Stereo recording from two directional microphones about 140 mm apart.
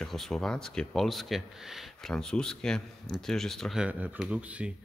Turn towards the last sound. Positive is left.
turn(degrees=-10)  # may be behind; listen again after turning